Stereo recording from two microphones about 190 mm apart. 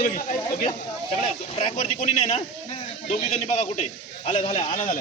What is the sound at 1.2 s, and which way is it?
A man's voice, 30° left (ahead or behind).